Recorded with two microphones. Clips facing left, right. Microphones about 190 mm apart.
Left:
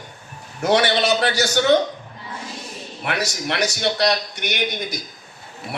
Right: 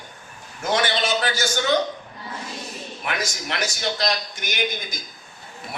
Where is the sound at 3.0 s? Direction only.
65° left (ahead or behind).